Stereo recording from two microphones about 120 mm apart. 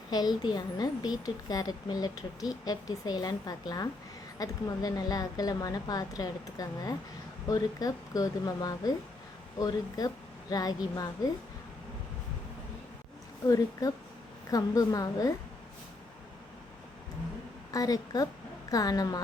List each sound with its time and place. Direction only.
0.1 s a woman's voice: 35° left (ahead or behind)
14.5 s a woman's voice: 30° left (ahead or behind)
17.7 s a woman's voice: 30° left (ahead or behind)